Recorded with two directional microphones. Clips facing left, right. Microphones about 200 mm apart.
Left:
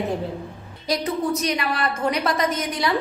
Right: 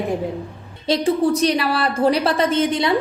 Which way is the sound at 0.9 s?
30° right (ahead or behind).